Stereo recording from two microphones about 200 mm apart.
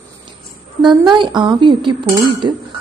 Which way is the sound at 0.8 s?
25° right (ahead or behind).